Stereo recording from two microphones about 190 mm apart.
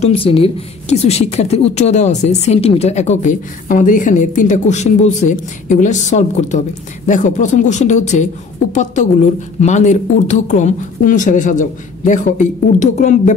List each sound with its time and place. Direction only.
0.0 s a woman's voice: 30° left (ahead or behind)